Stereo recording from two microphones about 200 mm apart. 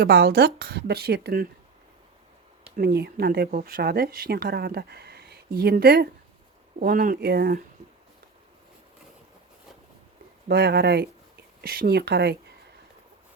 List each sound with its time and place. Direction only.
0.0 s speech: 55° right (ahead or behind)
2.7 s speech: 50° right (ahead or behind)
10.5 s speech: 55° right (ahead or behind)